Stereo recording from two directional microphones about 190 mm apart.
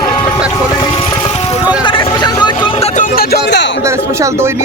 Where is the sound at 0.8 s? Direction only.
25° left (ahead or behind).